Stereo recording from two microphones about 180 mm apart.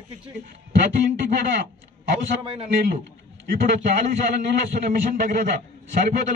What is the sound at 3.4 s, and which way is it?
A man's voice, 50° right (ahead or behind).